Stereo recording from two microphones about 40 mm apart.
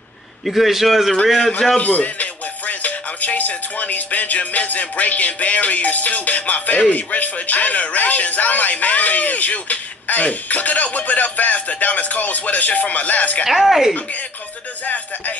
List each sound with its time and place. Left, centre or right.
0.5 s a man's voice: centre
1.8 s speech: left
13.5 s a man's voice: centre